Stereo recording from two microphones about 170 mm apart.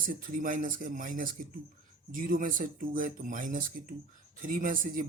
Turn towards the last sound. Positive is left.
turn(degrees=-55)  # may be behind; listen again after turning